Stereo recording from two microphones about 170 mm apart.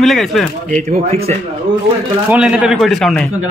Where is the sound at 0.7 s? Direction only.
45° right (ahead or behind).